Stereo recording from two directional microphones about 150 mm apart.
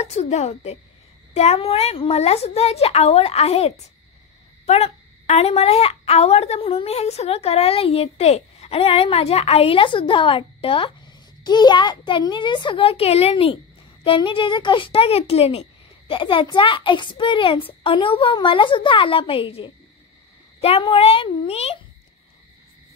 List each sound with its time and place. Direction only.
0.0 s a woman's voice: 50° left (ahead or behind)